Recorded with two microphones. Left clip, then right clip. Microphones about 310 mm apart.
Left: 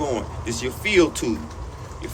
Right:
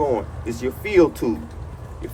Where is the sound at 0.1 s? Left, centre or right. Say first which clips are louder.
Right 3 dB; centre.